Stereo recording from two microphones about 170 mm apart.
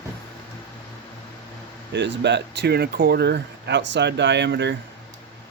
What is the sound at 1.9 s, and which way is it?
Speech, 90° right.